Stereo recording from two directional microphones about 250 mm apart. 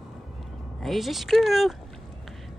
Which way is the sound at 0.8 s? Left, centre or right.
Centre.